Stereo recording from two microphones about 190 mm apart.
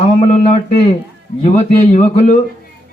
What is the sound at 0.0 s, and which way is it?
A man's voice, 35° left (ahead or behind).